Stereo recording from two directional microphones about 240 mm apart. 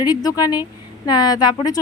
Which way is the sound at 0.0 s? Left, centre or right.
Centre.